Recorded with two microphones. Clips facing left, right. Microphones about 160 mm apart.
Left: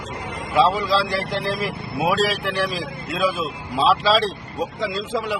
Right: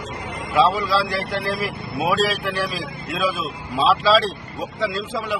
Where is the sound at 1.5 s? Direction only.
20° left (ahead or behind).